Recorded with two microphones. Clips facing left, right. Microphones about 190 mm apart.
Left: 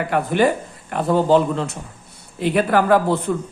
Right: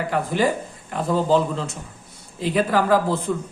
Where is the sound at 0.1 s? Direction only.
60° left (ahead or behind).